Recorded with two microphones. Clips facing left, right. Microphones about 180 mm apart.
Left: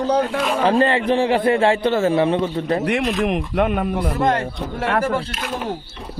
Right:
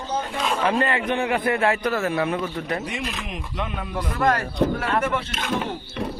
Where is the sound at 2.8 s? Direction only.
65° left (ahead or behind).